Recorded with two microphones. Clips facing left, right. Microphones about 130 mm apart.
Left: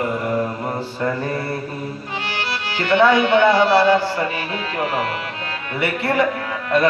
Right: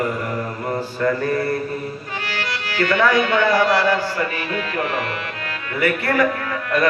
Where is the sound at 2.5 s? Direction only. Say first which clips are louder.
Left 1 dB; 25° left (ahead or behind).